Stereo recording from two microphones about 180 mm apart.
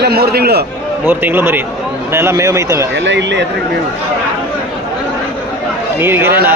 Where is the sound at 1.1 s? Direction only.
10° right (ahead or behind).